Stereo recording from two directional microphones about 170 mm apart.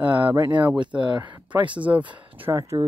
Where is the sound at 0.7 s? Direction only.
25° right (ahead or behind).